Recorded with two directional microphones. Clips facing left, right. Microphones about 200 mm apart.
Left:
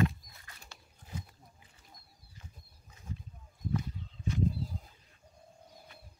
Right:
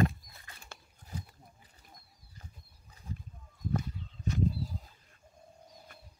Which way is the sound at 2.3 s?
40° right (ahead or behind).